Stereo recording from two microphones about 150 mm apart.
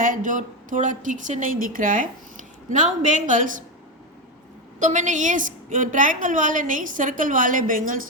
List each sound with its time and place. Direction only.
0.0 s a woman's voice: 60° right (ahead or behind)
4.8 s a woman's voice: 55° right (ahead or behind)